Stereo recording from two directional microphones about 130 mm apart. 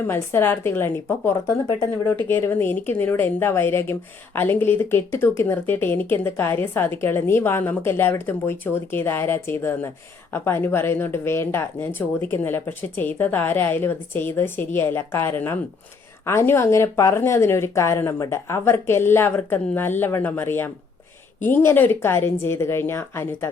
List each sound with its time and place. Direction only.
0.0 s speech: 20° left (ahead or behind)